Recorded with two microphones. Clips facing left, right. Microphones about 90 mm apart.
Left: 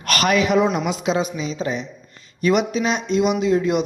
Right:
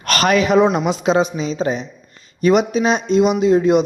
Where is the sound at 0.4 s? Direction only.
35° right (ahead or behind).